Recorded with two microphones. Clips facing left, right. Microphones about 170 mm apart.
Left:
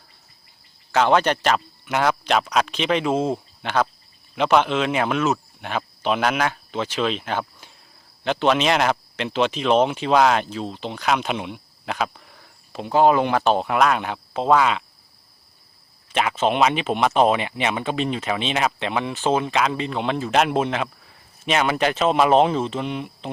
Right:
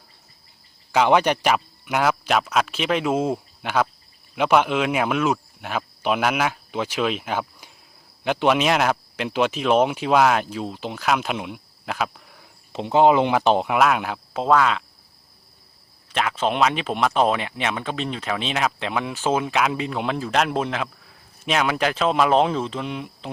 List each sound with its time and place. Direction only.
0.9 s speech: 10° right (ahead or behind)
12.7 s speech: 20° right (ahead or behind)
13.7 s speech: 5° right (ahead or behind)
16.1 s speech: 5° left (ahead or behind)